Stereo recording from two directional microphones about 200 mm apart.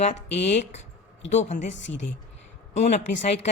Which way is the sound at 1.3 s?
35° left (ahead or behind).